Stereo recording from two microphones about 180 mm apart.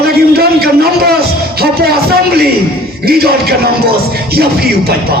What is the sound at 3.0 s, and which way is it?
A man's voice, 60° right (ahead or behind).